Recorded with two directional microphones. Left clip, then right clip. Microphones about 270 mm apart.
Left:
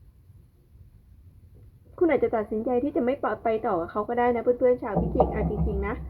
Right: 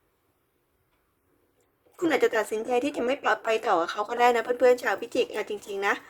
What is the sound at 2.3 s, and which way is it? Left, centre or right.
A woman's voice, centre.